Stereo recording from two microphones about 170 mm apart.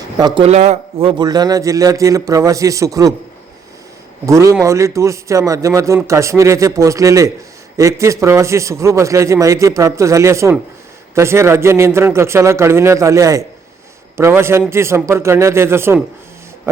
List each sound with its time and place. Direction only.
0.2 s a man's voice: 25° right (ahead or behind)
0.4 s a man's voice: 40° right (ahead or behind); by 3.1 s 20° right (ahead or behind)
4.3 s a man's voice: 20° right (ahead or behind)